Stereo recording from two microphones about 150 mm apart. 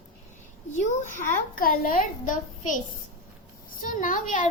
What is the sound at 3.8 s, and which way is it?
Speech, 65° left (ahead or behind).